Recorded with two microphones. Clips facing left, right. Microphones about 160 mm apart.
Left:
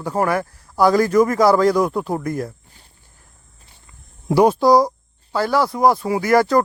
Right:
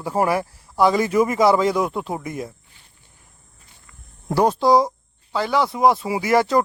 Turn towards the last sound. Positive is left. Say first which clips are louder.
# left 2 dB
turn(degrees=-25)  # may be behind; listen again after turning